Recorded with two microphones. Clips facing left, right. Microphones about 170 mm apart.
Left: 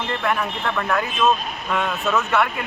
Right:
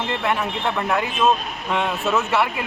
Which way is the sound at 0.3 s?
20° right (ahead or behind).